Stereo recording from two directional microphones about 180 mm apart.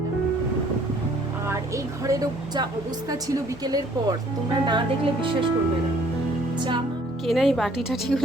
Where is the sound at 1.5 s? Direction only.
15° right (ahead or behind).